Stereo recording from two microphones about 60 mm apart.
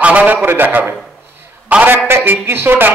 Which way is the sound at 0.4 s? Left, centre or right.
Right.